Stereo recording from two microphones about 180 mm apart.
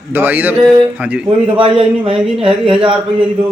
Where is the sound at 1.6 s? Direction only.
30° right (ahead or behind).